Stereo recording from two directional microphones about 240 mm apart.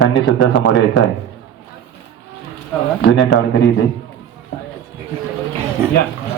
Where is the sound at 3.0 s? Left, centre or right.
Left.